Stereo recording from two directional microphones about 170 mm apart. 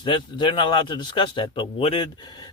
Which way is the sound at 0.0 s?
30° left (ahead or behind).